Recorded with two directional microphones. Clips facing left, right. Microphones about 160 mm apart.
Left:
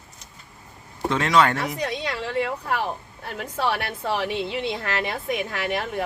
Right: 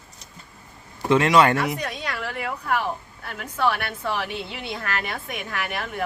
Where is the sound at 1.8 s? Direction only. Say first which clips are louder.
Left 3 dB; 25° left (ahead or behind).